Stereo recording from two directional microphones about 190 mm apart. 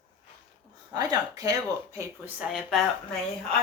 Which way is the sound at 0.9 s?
20° right (ahead or behind).